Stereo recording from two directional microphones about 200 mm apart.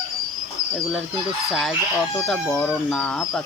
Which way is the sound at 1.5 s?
Centre (ahead or behind).